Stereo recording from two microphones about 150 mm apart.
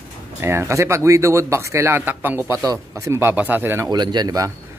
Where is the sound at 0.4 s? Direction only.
15° right (ahead or behind).